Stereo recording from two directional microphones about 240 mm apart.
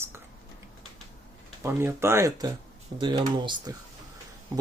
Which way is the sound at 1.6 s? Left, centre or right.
Centre.